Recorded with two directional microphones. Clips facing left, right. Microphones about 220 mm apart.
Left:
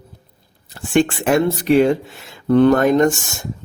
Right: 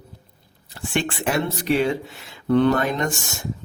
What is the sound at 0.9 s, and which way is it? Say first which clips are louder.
Speech: left 8 dB; 45° left (ahead or behind).